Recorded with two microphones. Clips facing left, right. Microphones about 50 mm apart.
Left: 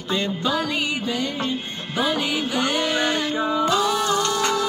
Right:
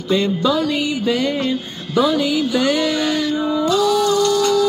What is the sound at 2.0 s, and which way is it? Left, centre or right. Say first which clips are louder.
Music: right 7 dB; left.